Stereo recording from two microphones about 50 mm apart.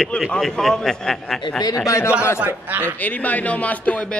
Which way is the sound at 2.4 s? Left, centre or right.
Right.